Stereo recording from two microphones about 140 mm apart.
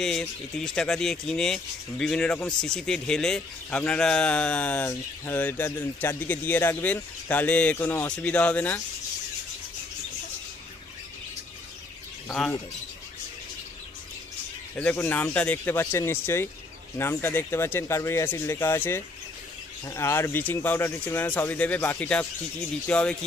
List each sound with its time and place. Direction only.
0.0 s speech: 5° left (ahead or behind)
14.8 s speech: 15° left (ahead or behind)